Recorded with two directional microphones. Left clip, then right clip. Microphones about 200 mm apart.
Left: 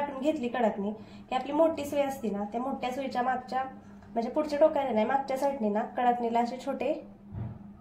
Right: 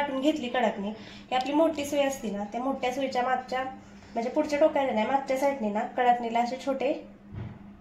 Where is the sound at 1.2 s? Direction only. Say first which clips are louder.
Right 1 dB; 5° right (ahead or behind).